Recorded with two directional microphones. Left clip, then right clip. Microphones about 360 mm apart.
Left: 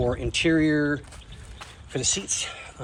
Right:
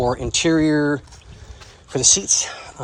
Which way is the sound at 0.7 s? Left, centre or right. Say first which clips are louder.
Right 5 dB; centre.